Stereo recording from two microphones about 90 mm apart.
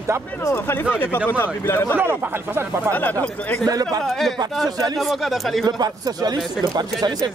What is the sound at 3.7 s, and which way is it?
Speech, 45° right (ahead or behind).